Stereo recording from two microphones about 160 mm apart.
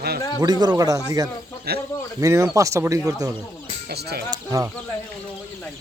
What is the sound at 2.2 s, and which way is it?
Speech, 20° right (ahead or behind).